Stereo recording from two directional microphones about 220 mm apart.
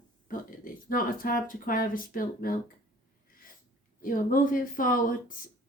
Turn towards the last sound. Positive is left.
turn(degrees=40)  # may be behind; listen again after turning